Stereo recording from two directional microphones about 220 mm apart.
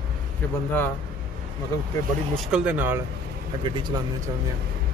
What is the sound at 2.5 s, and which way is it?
Speech, 5° right (ahead or behind).